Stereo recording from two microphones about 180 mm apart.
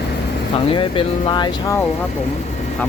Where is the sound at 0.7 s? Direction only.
30° left (ahead or behind).